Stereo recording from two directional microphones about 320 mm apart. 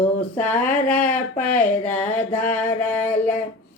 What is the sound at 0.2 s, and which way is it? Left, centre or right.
Speech, centre.